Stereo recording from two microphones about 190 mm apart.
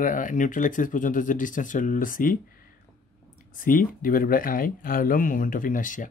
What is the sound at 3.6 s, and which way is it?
Speech, 50° left (ahead or behind).